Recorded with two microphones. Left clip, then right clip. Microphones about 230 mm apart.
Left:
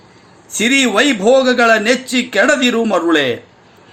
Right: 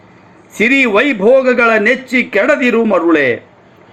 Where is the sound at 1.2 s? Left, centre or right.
Centre.